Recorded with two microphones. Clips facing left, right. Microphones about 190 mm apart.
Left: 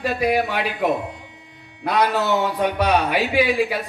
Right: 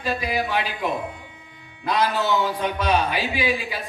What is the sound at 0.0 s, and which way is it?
A man's voice, 65° left (ahead or behind).